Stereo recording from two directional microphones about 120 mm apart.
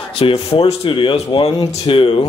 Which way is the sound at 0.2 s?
50° left (ahead or behind).